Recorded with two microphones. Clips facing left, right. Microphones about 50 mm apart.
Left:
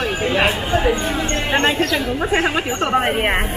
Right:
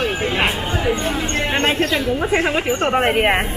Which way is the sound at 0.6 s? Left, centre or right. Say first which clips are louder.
Left 4 dB; centre.